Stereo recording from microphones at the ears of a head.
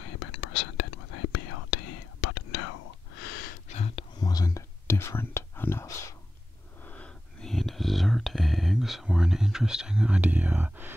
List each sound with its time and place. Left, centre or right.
0.0 s whispering: left
7.4 s whispering: centre